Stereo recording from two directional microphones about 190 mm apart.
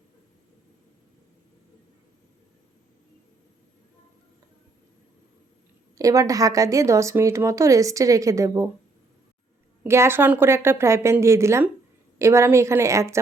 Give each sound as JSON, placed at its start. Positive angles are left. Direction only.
{"t": 6.0, "sound": "a woman's voice", "side_deg": -15}
{"t": 9.8, "sound": "a woman's voice", "side_deg": -15}